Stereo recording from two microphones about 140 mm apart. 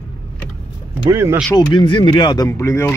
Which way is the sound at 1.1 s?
20° right (ahead or behind).